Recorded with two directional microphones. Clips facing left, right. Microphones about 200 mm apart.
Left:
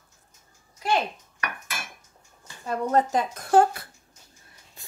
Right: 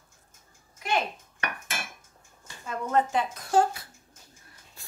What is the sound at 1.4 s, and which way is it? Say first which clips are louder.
Cutlery: even; 30° right (ahead or behind).